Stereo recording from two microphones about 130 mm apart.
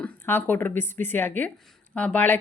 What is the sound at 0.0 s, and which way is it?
Speech, 15° left (ahead or behind).